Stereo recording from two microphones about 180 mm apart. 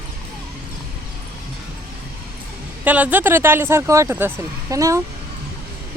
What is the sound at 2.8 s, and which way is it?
Speech, 10° right (ahead or behind).